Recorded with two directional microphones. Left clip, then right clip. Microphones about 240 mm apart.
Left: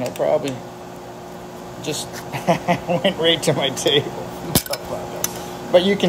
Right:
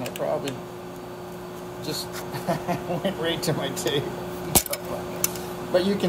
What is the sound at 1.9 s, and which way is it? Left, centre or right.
Speech, left.